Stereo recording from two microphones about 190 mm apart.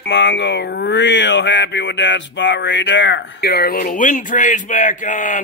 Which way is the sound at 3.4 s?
55° left (ahead or behind).